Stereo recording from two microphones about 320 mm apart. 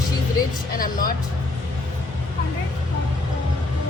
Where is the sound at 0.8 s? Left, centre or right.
Left.